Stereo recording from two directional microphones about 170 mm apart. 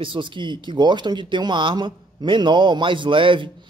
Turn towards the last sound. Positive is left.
turn(degrees=-30)  # may be behind; listen again after turning